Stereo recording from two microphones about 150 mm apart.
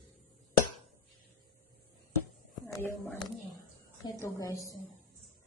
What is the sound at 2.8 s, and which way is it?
Speech, 10° left (ahead or behind).